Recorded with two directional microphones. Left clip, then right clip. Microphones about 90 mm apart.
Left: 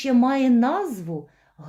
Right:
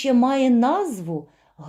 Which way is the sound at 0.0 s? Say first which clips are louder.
Right 2 dB; 25° right (ahead or behind).